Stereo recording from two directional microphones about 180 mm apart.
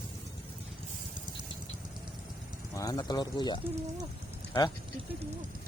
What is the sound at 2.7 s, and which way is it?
Speech, 20° left (ahead or behind).